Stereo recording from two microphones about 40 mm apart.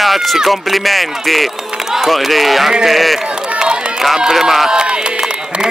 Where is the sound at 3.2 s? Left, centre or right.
Right.